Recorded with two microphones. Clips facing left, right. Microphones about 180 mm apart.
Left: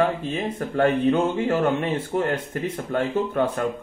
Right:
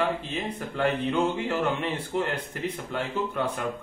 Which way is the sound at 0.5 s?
45° left (ahead or behind).